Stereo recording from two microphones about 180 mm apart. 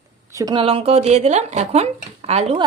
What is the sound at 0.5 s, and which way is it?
Speech, 30° right (ahead or behind).